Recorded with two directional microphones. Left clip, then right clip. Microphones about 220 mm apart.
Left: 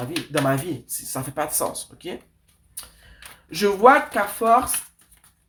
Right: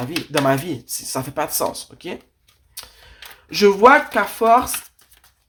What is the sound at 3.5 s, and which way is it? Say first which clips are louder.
Speech: right 4 dB; 30° right (ahead or behind).